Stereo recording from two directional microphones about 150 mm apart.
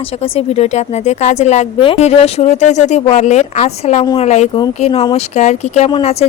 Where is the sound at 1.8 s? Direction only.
40° left (ahead or behind).